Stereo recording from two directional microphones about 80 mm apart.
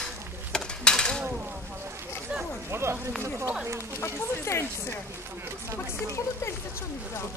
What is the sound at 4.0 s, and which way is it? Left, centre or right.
Speech, left.